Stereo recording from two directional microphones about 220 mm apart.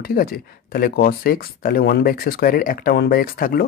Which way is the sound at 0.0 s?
45° left (ahead or behind).